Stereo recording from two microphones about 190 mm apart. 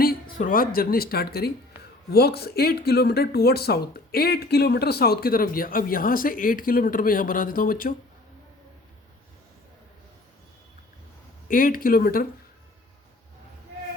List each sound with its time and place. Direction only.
0.3 s speech: 45° left (ahead or behind)
11.4 s speech: 50° left (ahead or behind)